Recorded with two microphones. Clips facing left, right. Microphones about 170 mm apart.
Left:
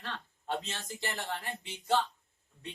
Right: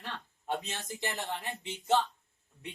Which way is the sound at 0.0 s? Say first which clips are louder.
Even; 15° right (ahead or behind).